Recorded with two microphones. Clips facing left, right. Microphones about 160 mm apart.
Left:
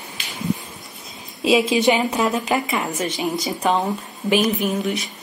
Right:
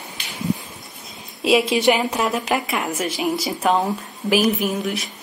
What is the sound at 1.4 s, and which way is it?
A woman's voice, centre (ahead or behind).